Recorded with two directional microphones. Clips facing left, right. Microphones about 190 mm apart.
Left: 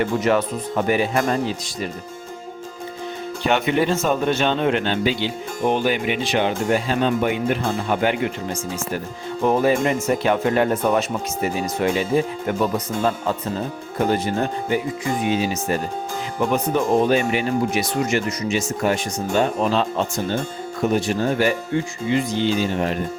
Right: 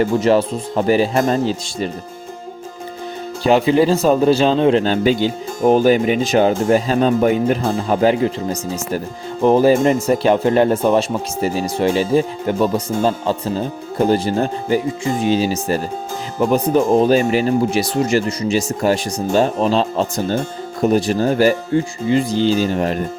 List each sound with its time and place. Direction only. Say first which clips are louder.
0.0 s speech: right 5 dB; 30° right (ahead or behind)
3.4 s speech: right 6 dB; 30° right (ahead or behind)